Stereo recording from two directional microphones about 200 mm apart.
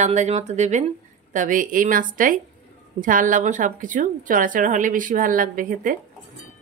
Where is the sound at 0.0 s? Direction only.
35° right (ahead or behind).